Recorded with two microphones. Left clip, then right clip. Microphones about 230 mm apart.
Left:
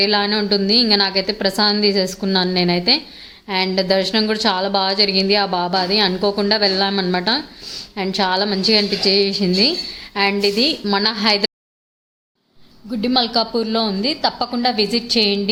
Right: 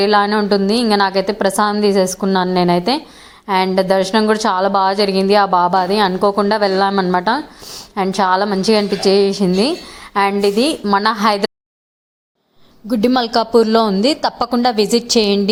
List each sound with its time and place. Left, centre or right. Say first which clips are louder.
0.0 s a woman's voice: right 4 dB; centre
12.9 s a woman's voice: right 3 dB; right